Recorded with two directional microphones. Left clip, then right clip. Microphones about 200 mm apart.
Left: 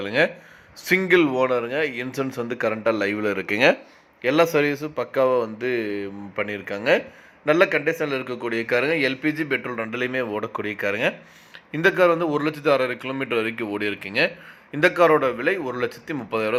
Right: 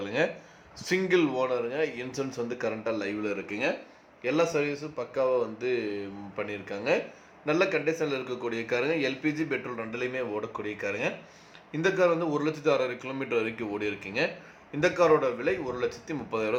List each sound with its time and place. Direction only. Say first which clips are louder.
0.0 s a sound: left 7 dB; 25° left (ahead or behind)
0.9 s a man's voice: left 7 dB; 25° left (ahead or behind)
9.6 s a man's voice: left 7 dB; 30° left (ahead or behind)